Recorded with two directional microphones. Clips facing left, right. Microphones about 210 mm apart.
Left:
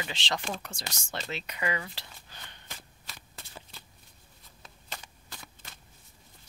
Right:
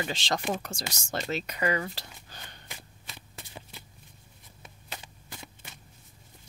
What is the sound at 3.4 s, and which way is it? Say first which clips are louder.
Shuffling cards: right 3 dB; 15° right (ahead or behind).